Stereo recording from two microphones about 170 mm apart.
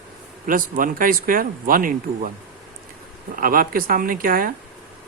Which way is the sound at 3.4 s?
60° right (ahead or behind).